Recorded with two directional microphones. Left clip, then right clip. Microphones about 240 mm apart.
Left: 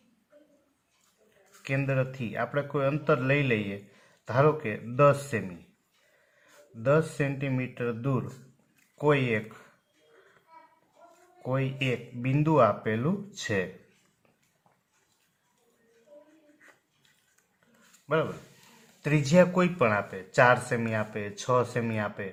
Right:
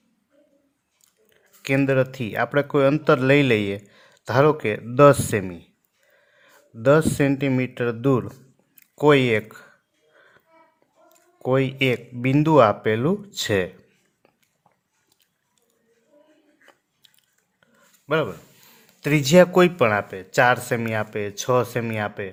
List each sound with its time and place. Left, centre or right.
1.6 s a man's voice: right
6.8 s a man's voice: right
11.4 s a man's voice: right
18.1 s a man's voice: right